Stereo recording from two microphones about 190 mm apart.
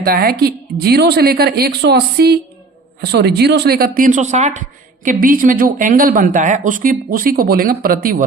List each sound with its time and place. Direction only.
0.0 s a woman's voice: 55° right (ahead or behind)